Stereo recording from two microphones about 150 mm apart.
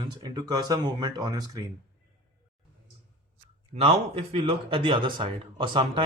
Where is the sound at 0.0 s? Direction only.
30° right (ahead or behind).